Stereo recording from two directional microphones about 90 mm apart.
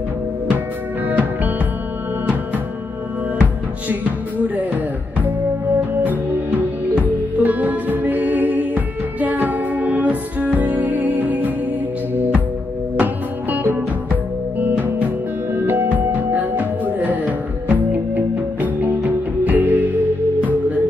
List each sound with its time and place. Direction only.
1.0 s music: 20° right (ahead or behind)
7.0 s music: 15° right (ahead or behind)
12.9 s music: 20° right (ahead or behind)